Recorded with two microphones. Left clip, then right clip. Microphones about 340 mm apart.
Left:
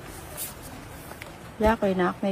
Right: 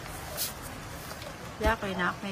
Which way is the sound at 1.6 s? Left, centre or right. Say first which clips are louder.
Left 6 dB; centre.